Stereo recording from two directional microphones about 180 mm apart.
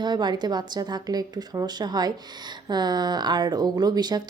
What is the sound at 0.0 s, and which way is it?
Speech, 25° right (ahead or behind).